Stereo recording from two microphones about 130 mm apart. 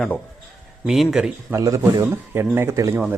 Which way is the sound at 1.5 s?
25° right (ahead or behind).